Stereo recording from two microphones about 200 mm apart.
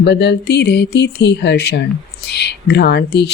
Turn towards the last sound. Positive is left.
turn(degrees=55)  # may be behind; listen again after turning